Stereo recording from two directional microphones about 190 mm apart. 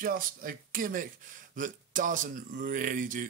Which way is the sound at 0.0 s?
45° right (ahead or behind).